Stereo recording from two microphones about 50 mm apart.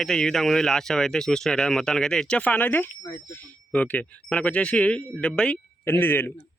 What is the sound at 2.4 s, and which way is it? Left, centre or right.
Speech, left.